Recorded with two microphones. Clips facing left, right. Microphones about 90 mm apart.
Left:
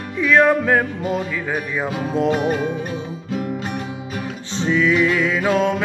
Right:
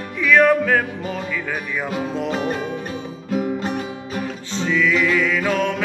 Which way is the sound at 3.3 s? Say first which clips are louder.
Right 4 dB; 5° right (ahead or behind).